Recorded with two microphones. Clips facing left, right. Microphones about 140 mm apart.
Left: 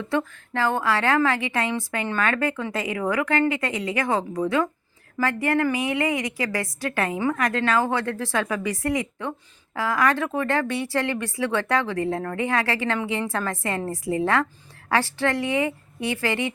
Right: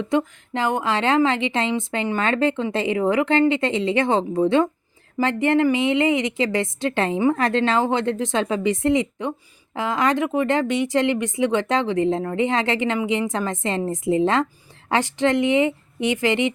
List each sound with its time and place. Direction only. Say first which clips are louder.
0.0 s speech: right 4 dB; 20° right (ahead or behind)